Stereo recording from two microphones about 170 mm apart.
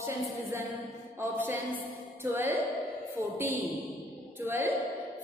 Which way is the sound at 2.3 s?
15° right (ahead or behind).